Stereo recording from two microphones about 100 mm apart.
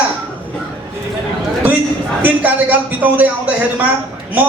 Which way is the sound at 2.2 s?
20° right (ahead or behind).